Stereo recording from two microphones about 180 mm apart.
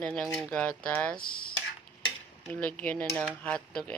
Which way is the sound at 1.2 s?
55° left (ahead or behind).